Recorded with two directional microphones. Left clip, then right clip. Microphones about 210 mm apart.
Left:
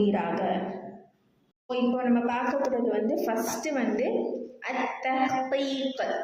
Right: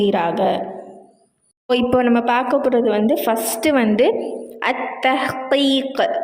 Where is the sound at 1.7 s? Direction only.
45° right (ahead or behind).